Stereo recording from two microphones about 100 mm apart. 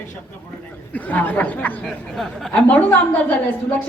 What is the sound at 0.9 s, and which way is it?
Speech, 15° left (ahead or behind).